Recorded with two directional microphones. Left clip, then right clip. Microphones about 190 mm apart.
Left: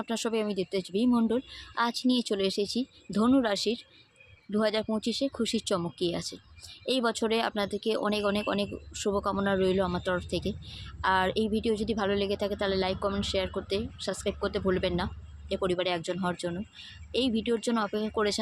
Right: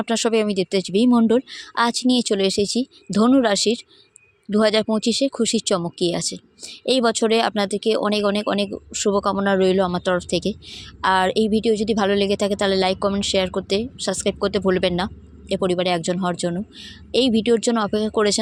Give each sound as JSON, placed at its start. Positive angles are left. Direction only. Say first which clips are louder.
{"t": 0.0, "sound": "speech", "louder": "right 11 dB", "side_deg": -45}